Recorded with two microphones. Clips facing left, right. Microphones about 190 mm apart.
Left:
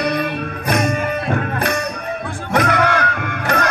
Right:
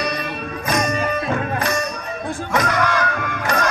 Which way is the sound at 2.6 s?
60° left (ahead or behind).